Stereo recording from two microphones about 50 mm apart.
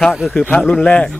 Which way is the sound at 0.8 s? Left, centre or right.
Left.